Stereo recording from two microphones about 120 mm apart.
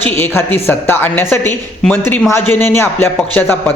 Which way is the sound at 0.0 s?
15° left (ahead or behind).